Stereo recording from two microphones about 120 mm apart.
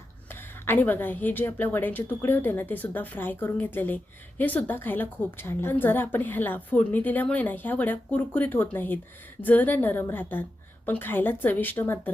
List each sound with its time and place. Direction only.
0.3 s a woman's voice: 20° left (ahead or behind)